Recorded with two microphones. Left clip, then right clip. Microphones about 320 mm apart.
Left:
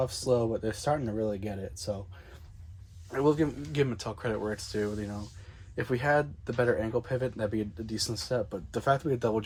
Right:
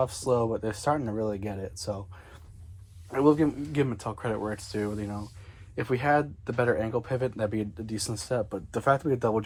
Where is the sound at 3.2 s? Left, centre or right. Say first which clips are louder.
Right 4 dB; centre.